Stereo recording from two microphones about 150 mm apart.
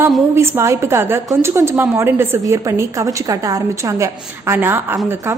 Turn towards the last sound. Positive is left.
turn(degrees=-15)  # may be behind; listen again after turning